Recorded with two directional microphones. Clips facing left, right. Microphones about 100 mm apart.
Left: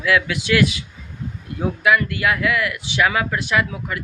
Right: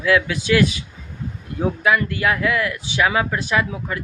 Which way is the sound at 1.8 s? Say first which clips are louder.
Left 1 dB; 30° right (ahead or behind).